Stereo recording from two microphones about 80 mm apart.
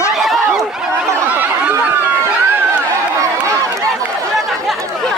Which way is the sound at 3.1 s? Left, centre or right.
Right.